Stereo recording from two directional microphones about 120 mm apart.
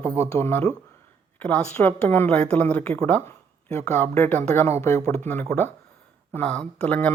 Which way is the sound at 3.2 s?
20° left (ahead or behind).